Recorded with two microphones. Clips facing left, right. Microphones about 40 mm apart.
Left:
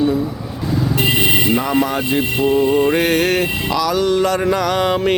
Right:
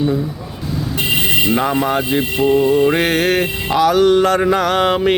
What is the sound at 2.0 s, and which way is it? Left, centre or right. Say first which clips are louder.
Mantra: right 1 dB; centre.